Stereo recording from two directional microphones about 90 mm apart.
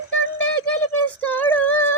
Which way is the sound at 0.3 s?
20° left (ahead or behind).